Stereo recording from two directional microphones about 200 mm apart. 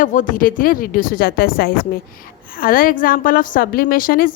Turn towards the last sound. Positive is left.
turn(degrees=45)  # may be behind; listen again after turning